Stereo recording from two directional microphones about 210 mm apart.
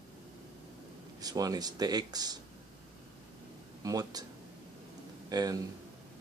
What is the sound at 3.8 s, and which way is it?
Speech, 20° right (ahead or behind).